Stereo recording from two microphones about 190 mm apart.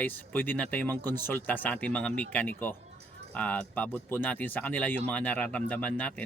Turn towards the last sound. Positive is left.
turn(degrees=5)  # may be behind; listen again after turning